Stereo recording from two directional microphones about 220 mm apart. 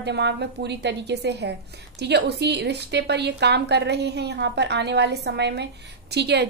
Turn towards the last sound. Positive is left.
turn(degrees=-50)  # may be behind; listen again after turning